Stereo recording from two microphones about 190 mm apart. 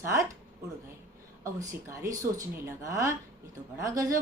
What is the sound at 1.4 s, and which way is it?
A woman's voice, 15° right (ahead or behind).